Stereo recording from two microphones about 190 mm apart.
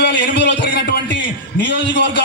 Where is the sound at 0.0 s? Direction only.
60° left (ahead or behind).